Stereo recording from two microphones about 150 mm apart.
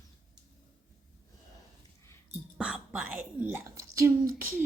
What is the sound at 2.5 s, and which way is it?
Whispering, 5° right (ahead or behind).